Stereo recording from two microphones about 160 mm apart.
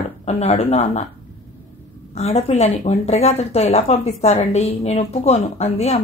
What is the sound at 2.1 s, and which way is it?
A woman's voice, 40° left (ahead or behind).